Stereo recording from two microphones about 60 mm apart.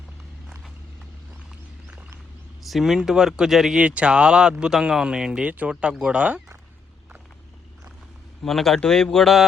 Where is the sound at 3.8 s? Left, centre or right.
Right.